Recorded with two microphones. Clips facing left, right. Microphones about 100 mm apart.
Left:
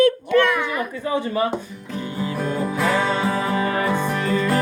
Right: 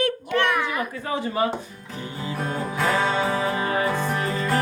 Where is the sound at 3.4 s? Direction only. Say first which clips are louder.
Left 2 dB; 20° right (ahead or behind).